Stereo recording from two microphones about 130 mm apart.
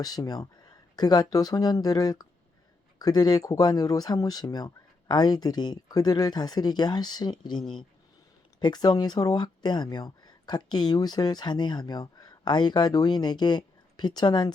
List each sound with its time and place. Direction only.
0.0 s speech: 30° left (ahead or behind)
8.6 s speech: 30° left (ahead or behind)